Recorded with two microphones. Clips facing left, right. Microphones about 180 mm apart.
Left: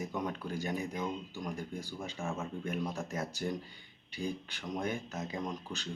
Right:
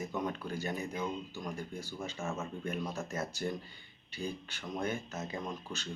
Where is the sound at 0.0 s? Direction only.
10° left (ahead or behind).